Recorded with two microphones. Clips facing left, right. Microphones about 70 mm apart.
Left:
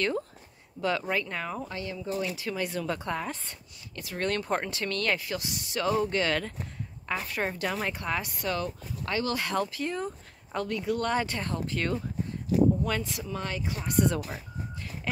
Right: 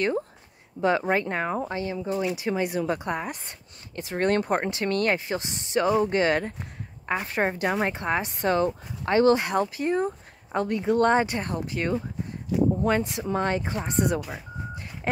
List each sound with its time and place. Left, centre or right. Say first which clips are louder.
0.7 s speech: right 6 dB; right
11.2 s speech: right 3 dB; right
13.2 s speech: right 8 dB; right
13.8 s speech: left 1 dB; right